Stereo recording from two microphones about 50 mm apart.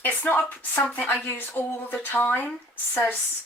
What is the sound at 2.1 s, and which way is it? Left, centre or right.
Speech, left.